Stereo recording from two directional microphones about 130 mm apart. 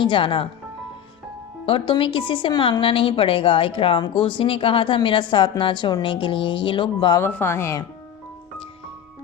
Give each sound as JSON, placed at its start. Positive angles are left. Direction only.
{"t": 0.0, "sound": "a woman's voice", "side_deg": 40}
{"t": 1.6, "sound": "a woman's voice", "side_deg": 40}
{"t": 7.2, "sound": "speech", "side_deg": 15}